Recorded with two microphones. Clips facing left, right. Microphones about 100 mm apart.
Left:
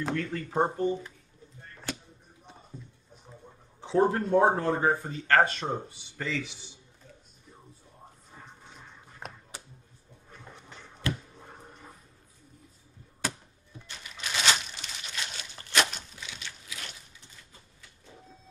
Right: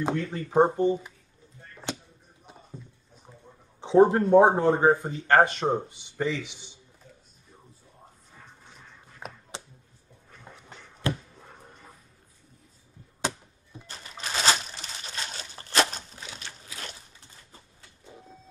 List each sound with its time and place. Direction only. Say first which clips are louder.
0.0 s speech: right 3 dB; 20° right (ahead or behind)
3.8 s speech: right 6 dB; 20° right (ahead or behind)
9.2 s a sound: right 2 dB; centre (ahead or behind)
13.8 s crumpling: right 2 dB; 35° right (ahead or behind)